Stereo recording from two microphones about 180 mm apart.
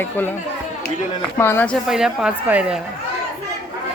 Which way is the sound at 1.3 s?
10° left (ahead or behind).